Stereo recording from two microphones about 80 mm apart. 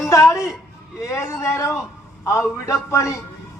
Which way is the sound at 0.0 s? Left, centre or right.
Left.